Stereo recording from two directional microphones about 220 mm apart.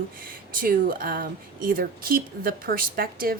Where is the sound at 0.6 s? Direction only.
40° right (ahead or behind).